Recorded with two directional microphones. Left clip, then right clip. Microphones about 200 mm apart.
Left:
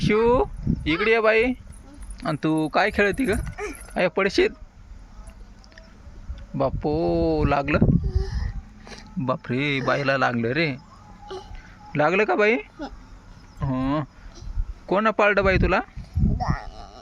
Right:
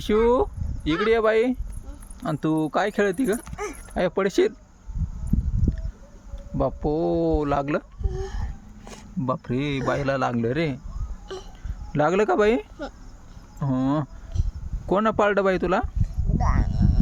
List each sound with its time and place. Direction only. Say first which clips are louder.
0.0 s speech: left 1 dB; 10° right (ahead or behind)
3.4 s mechanisms: even; centre (ahead or behind)
3.9 s speech: left 1 dB; 10° right (ahead or behind)
6.6 s speech: left 1 dB; 10° right (ahead or behind)
8.2 s speech: right 2 dB; 15° right (ahead or behind)
11.9 s speech: even; 20° right (ahead or behind)
13.6 s a sound: right 1 dB; 25° right (ahead or behind)
14.8 s speech: left 1 dB; 15° right (ahead or behind)
16.4 s a sound: right 5 dB; 5° right (ahead or behind)